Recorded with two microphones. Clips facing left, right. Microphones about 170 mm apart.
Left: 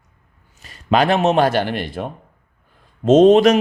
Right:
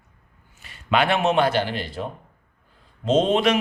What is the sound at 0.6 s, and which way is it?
A man's voice, 40° left (ahead or behind).